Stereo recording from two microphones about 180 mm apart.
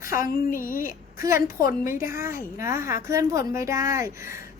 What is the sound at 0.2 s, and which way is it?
Speech, 50° left (ahead or behind).